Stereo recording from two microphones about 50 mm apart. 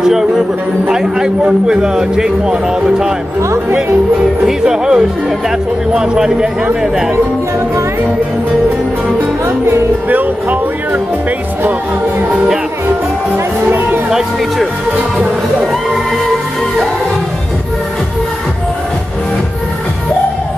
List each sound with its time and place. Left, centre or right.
0.0 s a man's voice: centre
4.5 s a man's voice: centre
10.0 s speech: right
13.7 s music: right